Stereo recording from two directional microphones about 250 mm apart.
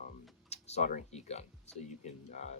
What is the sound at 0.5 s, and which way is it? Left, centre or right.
Speech, left.